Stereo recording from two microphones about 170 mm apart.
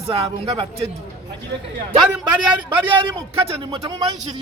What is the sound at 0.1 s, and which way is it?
Speech, 30° right (ahead or behind).